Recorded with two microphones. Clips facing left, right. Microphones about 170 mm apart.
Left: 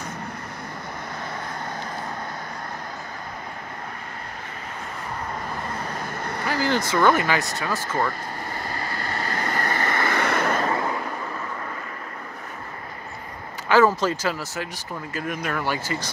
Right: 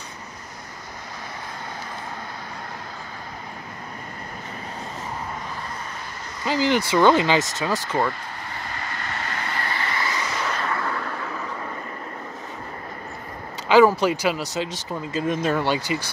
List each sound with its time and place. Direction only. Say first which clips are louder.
6.4 s vehicle: right 3 dB; 15° right (ahead or behind)
6.9 s speech: right 3 dB; 20° right (ahead or behind)
8.7 s vehicle: left 2 dB; 35° left (ahead or behind); by 10.6 s 55° left (ahead or behind)
10.7 s vehicle: left 2 dB; 20° left (ahead or behind)
13.7 s speech: right 3 dB; 15° right (ahead or behind)